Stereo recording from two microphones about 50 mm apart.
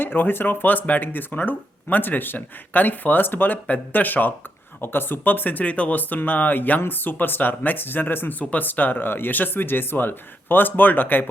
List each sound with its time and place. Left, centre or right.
0.0 s speech: left
8.4 s speech: left